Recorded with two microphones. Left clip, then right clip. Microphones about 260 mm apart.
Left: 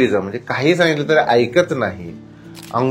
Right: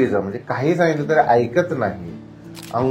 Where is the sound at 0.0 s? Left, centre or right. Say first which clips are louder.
Left 3 dB; left.